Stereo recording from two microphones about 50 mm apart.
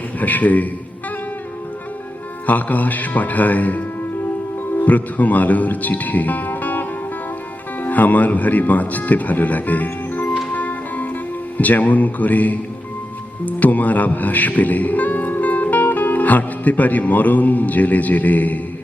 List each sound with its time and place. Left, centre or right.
0.2 s speech: left
2.5 s speech: left
10.5 s music: left
11.5 s speech: left